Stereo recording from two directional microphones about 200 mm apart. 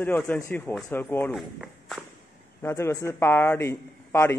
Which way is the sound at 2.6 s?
15° left (ahead or behind).